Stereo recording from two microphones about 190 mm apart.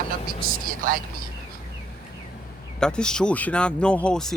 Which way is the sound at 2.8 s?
5° left (ahead or behind).